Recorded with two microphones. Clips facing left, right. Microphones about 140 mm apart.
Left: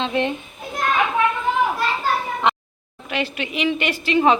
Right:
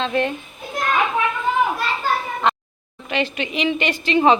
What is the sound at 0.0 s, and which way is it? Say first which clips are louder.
Speech: right 1 dB; 20° left (ahead or behind).